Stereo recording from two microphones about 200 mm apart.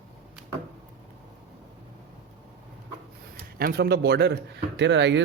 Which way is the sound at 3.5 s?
50° right (ahead or behind).